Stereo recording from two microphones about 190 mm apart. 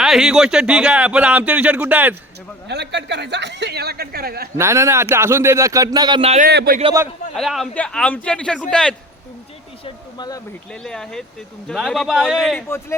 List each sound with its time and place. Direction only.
0.0 s speech: centre (ahead or behind)
2.6 s a woman's voice: 60° right (ahead or behind)
4.5 s speech: 15° right (ahead or behind)
6.4 s a woman's voice: 55° right (ahead or behind)
7.3 s a man's voice: centre (ahead or behind)
9.8 s speech: 20° left (ahead or behind)
10.7 s a man's voice: 5° left (ahead or behind)
12.5 s speech: 15° left (ahead or behind)